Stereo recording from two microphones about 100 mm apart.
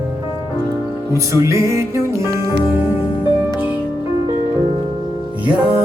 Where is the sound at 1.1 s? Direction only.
30° right (ahead or behind).